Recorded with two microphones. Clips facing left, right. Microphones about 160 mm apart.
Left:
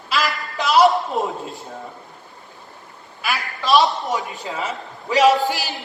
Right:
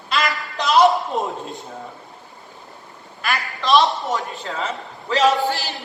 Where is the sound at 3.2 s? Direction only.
5° left (ahead or behind).